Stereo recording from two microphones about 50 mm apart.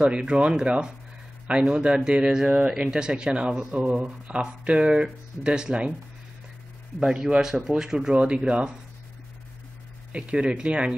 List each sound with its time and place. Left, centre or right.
0.0 s speech: centre
7.0 s speech: centre
10.1 s speech: centre